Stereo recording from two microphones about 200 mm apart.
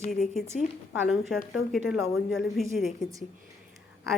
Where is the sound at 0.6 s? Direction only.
40° left (ahead or behind).